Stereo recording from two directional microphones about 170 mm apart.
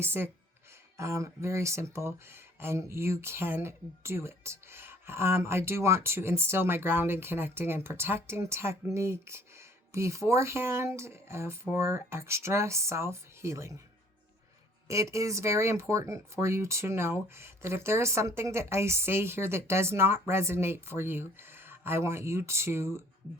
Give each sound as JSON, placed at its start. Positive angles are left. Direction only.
{"t": 0.0, "sound": "speech", "side_deg": -15}
{"t": 14.8, "sound": "speech", "side_deg": -20}